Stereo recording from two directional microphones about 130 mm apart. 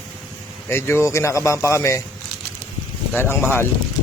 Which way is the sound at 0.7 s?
20° left (ahead or behind).